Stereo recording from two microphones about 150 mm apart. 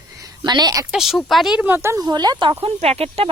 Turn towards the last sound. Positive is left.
turn(degrees=-40)  # may be behind; listen again after turning